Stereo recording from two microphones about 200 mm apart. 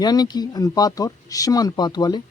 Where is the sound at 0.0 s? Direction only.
20° left (ahead or behind).